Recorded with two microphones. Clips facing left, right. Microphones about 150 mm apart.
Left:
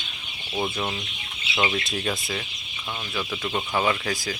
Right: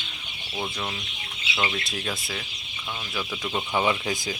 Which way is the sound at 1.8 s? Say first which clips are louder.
Left 4 dB; centre (ahead or behind).